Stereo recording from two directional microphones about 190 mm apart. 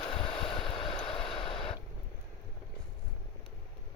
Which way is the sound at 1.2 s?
30° left (ahead or behind).